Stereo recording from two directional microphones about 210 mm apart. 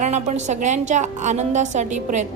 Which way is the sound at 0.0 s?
35° right (ahead or behind).